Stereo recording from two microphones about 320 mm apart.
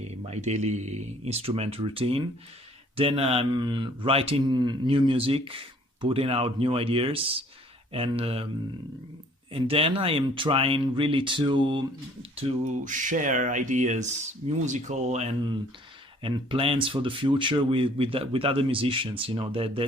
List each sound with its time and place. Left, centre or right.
0.1 s speech: right
9.5 s speech: centre